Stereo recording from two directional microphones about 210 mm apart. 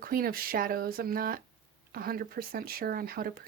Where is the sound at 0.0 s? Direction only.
45° right (ahead or behind).